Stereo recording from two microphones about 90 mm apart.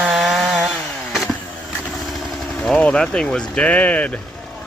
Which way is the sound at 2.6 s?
10° left (ahead or behind).